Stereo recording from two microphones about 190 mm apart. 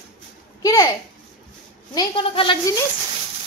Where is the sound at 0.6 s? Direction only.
15° left (ahead or behind).